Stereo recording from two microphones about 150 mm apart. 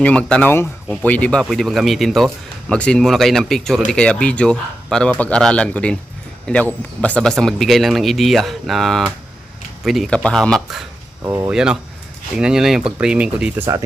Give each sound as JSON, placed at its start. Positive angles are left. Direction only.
{"t": 0.0, "sound": "speech", "side_deg": 10}
{"t": 11.2, "sound": "speech", "side_deg": -20}
{"t": 11.5, "sound": "speech", "side_deg": -5}